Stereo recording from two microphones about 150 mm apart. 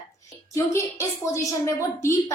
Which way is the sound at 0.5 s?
20° left (ahead or behind).